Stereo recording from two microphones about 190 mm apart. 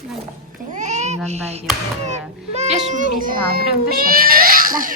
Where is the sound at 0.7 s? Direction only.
40° right (ahead or behind).